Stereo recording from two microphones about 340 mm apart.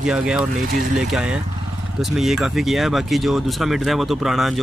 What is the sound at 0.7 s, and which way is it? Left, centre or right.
Speech, right.